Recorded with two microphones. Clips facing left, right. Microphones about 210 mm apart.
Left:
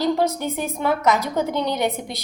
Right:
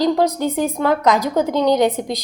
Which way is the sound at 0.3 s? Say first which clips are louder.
Right 5 dB; 15° right (ahead or behind).